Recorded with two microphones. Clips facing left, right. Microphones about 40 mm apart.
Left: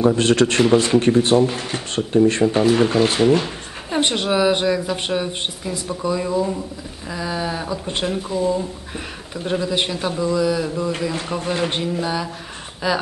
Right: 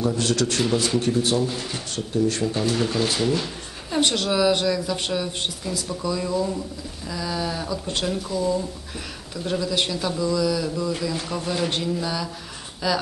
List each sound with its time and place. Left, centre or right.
0.0 s speech: left